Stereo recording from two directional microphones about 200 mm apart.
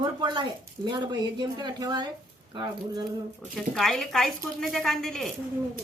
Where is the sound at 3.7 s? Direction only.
Centre (ahead or behind).